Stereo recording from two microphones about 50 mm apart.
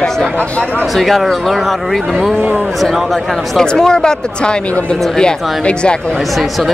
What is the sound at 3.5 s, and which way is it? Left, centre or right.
Speech, centre.